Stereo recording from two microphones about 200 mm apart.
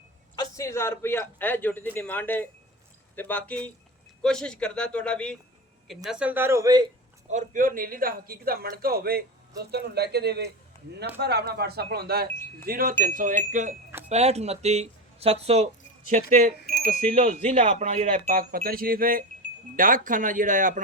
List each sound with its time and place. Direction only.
0.3 s a man's voice: 15° left (ahead or behind); by 6.8 s 15° right (ahead or behind)
7.3 s a man's voice: 40° right (ahead or behind)